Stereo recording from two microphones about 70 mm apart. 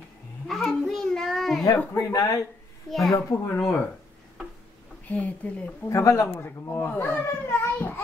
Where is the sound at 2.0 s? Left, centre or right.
Left.